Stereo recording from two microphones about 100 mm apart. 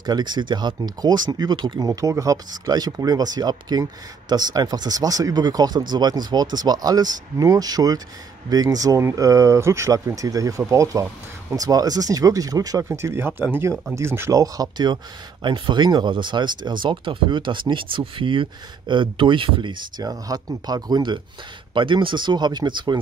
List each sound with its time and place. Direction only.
0.0 s speech: 45° right (ahead or behind)
1.8 s speech: 35° right (ahead or behind)
12.8 s speech: 25° right (ahead or behind); by 15.0 s 40° right (ahead or behind)
15.4 s speech: 55° right (ahead or behind)
20.0 s speech: 35° right (ahead or behind)